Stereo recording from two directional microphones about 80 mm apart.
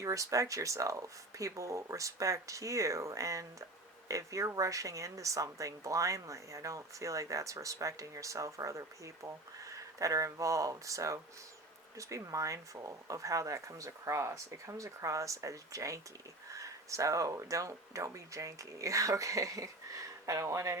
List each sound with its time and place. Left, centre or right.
0.0 s speech: right